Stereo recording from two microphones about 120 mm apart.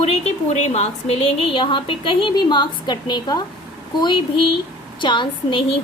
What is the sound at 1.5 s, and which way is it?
A woman's voice, 45° left (ahead or behind).